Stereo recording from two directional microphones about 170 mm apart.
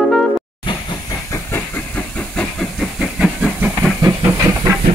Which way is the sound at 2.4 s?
Centre (ahead or behind).